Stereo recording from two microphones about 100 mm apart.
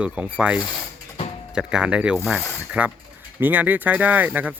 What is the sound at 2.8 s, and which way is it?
Speech, 20° right (ahead or behind).